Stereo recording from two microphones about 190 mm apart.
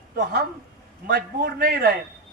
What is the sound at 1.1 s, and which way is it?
Speech, 55° right (ahead or behind).